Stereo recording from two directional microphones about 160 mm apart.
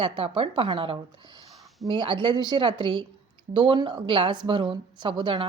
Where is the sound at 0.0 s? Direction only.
35° right (ahead or behind).